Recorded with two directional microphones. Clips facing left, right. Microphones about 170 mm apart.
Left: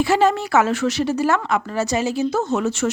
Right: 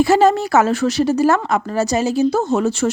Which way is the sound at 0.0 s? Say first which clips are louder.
Right 4 dB; 40° right (ahead or behind).